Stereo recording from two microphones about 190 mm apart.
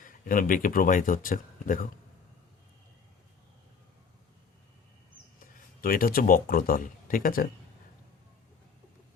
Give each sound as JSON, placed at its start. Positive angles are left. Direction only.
{"t": 0.0, "sound": "speech", "side_deg": 45}
{"t": 5.8, "sound": "speech", "side_deg": 50}